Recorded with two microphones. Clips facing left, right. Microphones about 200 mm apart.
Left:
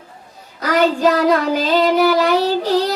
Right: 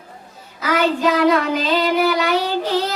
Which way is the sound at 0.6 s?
45° left (ahead or behind).